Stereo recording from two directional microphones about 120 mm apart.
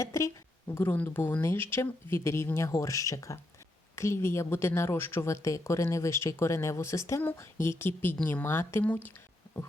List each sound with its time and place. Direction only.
0.0 s speech: 25° left (ahead or behind)